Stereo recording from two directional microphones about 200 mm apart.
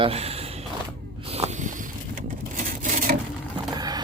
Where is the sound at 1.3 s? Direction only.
35° right (ahead or behind).